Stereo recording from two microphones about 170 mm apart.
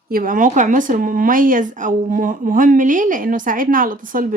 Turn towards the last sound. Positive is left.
turn(degrees=-55)  # may be behind; listen again after turning